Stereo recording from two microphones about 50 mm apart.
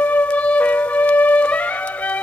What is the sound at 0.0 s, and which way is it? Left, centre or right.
Music, left.